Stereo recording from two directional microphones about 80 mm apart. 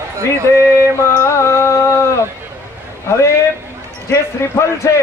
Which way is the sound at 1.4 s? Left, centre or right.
Left.